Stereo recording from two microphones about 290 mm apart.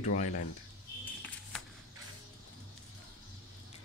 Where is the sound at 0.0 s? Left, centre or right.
Left.